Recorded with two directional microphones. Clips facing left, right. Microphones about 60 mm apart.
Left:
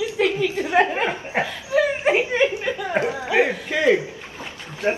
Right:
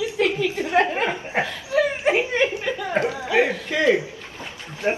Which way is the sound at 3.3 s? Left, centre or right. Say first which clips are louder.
Left 1 dB; centre.